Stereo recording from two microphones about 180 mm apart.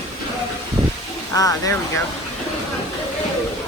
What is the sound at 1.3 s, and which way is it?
Speech, 20° left (ahead or behind).